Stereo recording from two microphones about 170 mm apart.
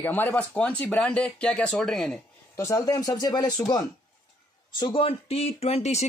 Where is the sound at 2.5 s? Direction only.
20° left (ahead or behind).